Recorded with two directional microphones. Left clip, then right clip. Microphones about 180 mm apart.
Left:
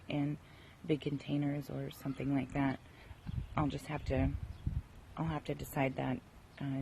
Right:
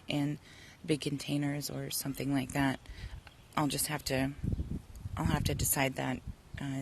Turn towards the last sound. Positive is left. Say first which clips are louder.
# right 2 dB
turn(degrees=-15)  # may be behind; listen again after turning